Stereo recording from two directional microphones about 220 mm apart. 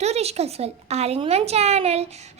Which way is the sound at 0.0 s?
30° right (ahead or behind).